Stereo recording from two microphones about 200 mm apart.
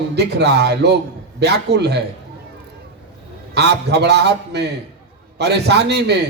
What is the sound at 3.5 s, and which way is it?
A man's voice, 55° right (ahead or behind).